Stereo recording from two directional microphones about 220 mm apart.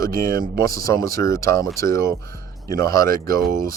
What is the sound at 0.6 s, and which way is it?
Speech, 15° left (ahead or behind).